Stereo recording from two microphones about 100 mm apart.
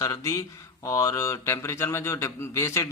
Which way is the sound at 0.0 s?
35° left (ahead or behind).